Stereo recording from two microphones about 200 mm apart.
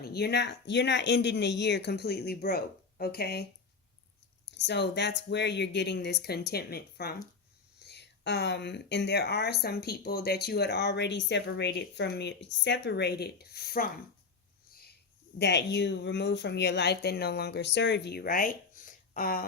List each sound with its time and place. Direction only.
0.0 s speech: 55° left (ahead or behind)
4.5 s speech: 60° left (ahead or behind)
15.4 s speech: 60° left (ahead or behind)